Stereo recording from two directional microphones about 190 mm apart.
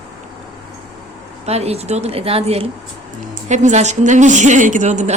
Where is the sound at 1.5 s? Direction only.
35° right (ahead or behind).